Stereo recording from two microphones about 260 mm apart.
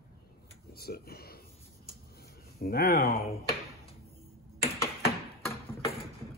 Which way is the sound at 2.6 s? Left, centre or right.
Left.